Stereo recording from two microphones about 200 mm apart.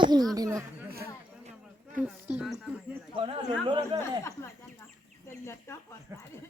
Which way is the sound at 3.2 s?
25° right (ahead or behind).